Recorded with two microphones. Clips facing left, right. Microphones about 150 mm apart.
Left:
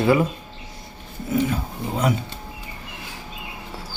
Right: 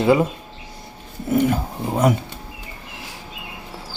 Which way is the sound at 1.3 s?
50° right (ahead or behind).